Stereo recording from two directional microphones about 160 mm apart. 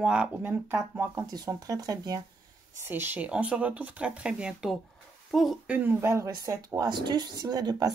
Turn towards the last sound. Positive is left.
turn(degrees=-25)  # may be behind; listen again after turning